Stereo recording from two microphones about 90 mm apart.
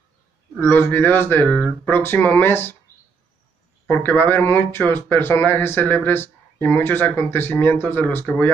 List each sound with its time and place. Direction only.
0.7 s speech: 20° left (ahead or behind)
3.9 s speech: 20° left (ahead or behind)